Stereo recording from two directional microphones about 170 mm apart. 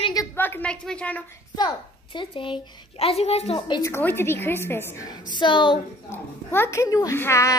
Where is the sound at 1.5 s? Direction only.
25° left (ahead or behind).